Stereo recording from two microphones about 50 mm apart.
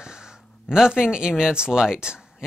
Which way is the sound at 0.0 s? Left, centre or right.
Centre.